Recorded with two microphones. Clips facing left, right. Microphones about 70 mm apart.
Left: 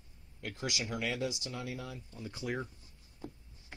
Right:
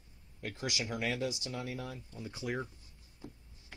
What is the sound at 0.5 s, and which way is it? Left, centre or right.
Speech, right.